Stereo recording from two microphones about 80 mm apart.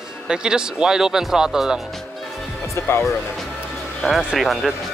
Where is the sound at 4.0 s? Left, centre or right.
Centre.